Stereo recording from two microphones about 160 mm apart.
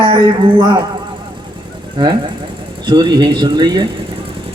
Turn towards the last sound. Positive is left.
turn(degrees=-25)  # may be behind; listen again after turning